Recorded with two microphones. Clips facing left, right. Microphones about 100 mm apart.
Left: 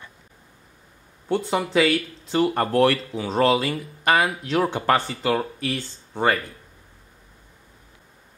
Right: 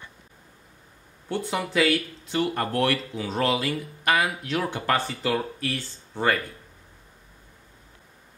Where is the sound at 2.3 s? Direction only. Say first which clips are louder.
Left 5 dB; 35° left (ahead or behind); by 6.4 s 20° left (ahead or behind).